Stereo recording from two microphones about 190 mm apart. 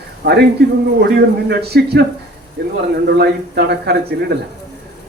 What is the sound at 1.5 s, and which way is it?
Speech, 60° right (ahead or behind).